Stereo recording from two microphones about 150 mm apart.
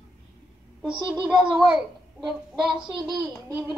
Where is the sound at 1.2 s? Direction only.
5° right (ahead or behind).